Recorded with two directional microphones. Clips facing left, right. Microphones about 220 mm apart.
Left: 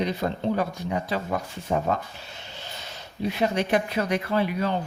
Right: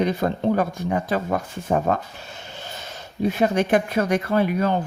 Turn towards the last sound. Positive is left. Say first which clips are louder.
# right 4 dB
turn(degrees=-50)  # may be behind; listen again after turning